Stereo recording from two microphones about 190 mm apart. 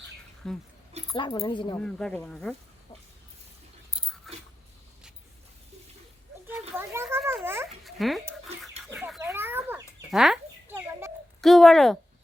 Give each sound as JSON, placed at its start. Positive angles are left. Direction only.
{"t": 0.4, "sound": "speech", "side_deg": 0}
{"t": 1.1, "sound": "speech", "side_deg": 25}
{"t": 1.8, "sound": "speech", "side_deg": 5}
{"t": 4.3, "sound": "dog", "side_deg": 0}
{"t": 6.5, "sound": "children playing", "side_deg": -10}
{"t": 7.4, "sound": "dog", "side_deg": -10}
{"t": 7.9, "sound": "dog", "side_deg": 0}
{"t": 9.2, "sound": "chicken", "side_deg": -10}
{"t": 11.3, "sound": "speech", "side_deg": 0}